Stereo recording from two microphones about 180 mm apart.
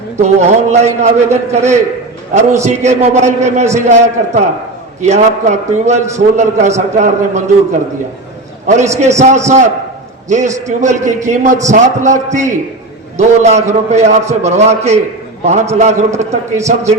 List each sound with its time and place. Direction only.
0.2 s a man's voice: 40° right (ahead or behind)
9.0 s a man's voice: 40° right (ahead or behind)